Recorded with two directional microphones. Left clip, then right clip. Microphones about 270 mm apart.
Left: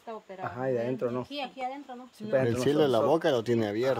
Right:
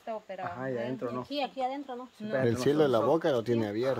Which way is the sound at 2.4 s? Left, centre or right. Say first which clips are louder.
Right 2 dB; centre.